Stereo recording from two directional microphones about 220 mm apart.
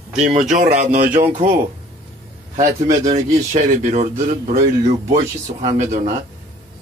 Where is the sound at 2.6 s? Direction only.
35° right (ahead or behind).